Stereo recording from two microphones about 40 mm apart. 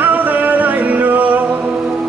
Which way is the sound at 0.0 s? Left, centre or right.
Right.